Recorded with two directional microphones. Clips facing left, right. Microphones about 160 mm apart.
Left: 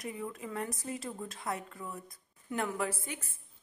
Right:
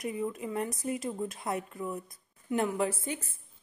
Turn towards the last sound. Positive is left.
turn(degrees=-25)  # may be behind; listen again after turning